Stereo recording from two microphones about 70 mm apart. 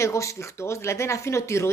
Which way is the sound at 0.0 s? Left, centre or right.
Left.